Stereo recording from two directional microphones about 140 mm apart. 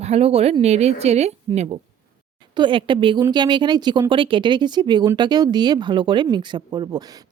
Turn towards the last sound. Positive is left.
turn(degrees=-30)  # may be behind; listen again after turning